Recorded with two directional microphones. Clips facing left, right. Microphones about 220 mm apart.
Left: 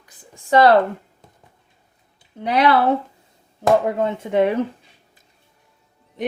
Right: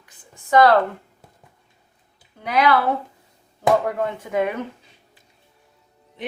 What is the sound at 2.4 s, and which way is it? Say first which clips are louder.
Speech: left 2 dB; 30° left (ahead or behind).